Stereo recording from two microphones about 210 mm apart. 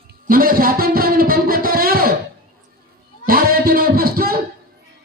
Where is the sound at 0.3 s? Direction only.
45° right (ahead or behind).